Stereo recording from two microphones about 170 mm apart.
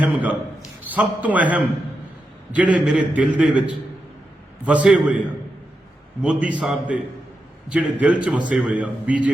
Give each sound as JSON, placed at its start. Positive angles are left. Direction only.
{"t": 0.0, "sound": "a man's voice", "side_deg": -10}
{"t": 6.2, "sound": "a man's voice", "side_deg": -5}